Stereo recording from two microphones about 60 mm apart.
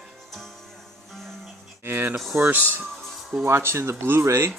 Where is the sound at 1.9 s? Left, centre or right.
Right.